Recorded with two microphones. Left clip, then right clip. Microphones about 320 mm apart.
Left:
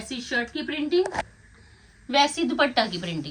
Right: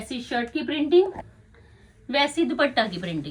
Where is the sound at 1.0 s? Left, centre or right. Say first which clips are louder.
Right 1 dB; right.